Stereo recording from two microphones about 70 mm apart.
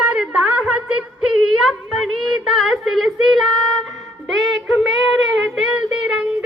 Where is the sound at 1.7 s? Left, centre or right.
Centre.